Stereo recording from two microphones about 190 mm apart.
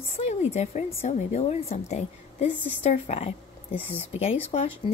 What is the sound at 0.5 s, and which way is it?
Speech, 35° left (ahead or behind).